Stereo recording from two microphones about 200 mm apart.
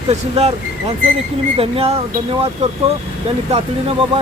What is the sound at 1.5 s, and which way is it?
Speech, 30° right (ahead or behind).